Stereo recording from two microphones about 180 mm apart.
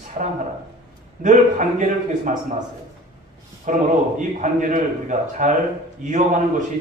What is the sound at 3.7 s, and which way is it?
A man's voice, 45° right (ahead or behind).